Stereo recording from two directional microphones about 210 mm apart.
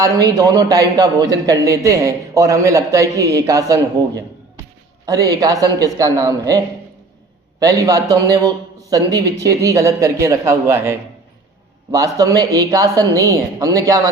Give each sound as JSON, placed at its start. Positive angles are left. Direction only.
{"t": 0.0, "sound": "a man's voice", "side_deg": -15}
{"t": 7.6, "sound": "a man's voice", "side_deg": -15}